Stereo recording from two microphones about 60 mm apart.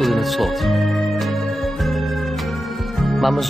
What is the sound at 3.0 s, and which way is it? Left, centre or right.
Music, centre.